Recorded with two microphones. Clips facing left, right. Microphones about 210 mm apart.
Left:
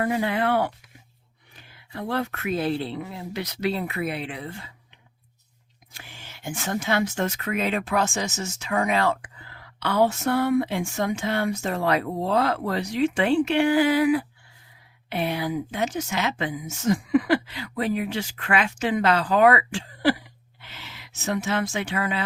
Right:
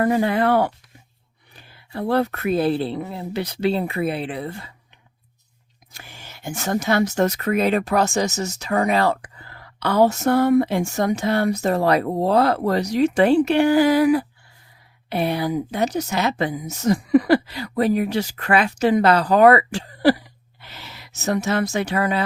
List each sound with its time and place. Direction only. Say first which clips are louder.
0.0 s speech: right 5 dB; 45° right (ahead or behind)
5.9 s speech: right 3 dB; 40° right (ahead or behind)